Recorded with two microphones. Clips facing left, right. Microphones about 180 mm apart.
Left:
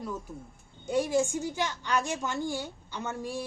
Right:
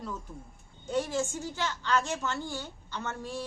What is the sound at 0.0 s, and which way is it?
A woman's voice, 10° left (ahead or behind).